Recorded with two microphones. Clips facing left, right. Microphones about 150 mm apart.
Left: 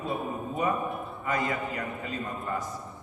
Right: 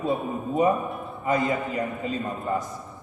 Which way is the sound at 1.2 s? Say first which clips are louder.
Right 6 dB; 25° right (ahead or behind).